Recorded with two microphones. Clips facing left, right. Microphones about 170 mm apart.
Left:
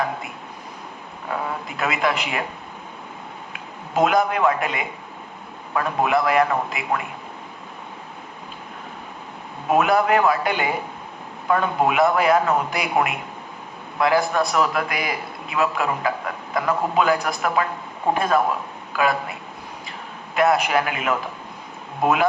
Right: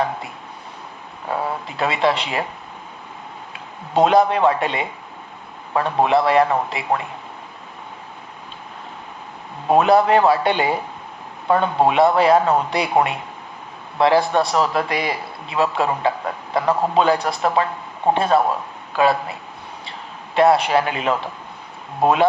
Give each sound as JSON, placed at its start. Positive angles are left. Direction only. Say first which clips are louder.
{"t": 1.3, "sound": "speech", "louder": "right 3 dB", "side_deg": -30}
{"t": 3.5, "sound": "a man's voice", "louder": "right 4 dB", "side_deg": -30}
{"t": 9.6, "sound": "a man's voice", "louder": "right 4 dB", "side_deg": -30}